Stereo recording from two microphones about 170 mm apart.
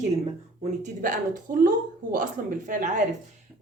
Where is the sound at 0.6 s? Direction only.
50° right (ahead or behind).